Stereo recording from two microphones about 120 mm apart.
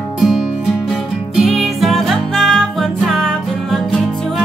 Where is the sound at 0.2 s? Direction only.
Centre (ahead or behind).